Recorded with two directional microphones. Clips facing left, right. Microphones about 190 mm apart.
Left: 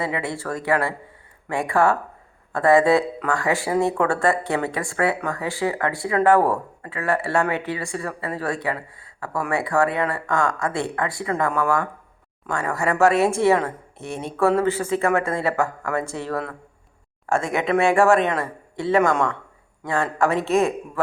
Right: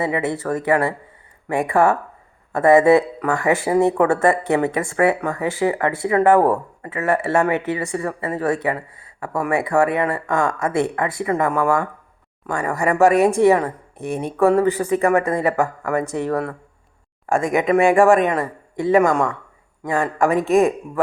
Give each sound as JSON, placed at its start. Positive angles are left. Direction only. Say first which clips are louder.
{"t": 0.0, "sound": "a woman's voice", "louder": "right 5 dB", "side_deg": -20}